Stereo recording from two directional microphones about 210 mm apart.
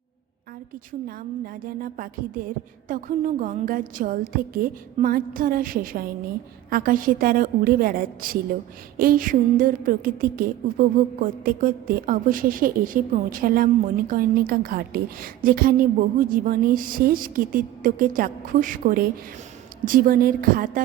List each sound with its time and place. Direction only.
1.0 s a woman's voice: 45° right (ahead or behind)